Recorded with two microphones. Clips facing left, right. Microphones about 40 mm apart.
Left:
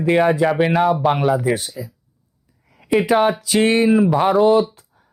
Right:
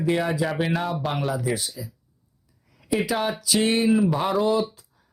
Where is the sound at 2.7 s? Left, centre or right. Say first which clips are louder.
Left 8 dB; left.